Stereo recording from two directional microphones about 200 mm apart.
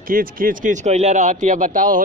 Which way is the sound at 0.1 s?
45° right (ahead or behind).